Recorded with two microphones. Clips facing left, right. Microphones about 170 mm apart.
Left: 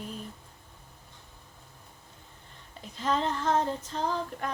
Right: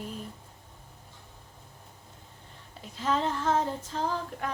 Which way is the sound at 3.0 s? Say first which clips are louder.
Even; 5° right (ahead or behind).